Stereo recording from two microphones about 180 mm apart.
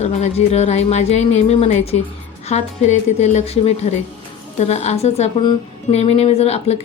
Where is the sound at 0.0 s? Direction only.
40° left (ahead or behind).